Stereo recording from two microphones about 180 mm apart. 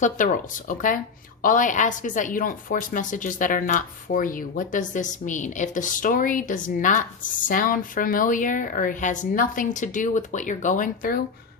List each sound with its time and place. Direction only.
0.0 s a woman's voice: 45° left (ahead or behind)